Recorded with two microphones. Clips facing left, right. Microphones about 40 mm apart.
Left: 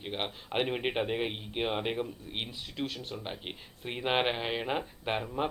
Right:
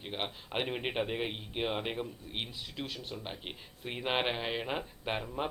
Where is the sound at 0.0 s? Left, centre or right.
Centre.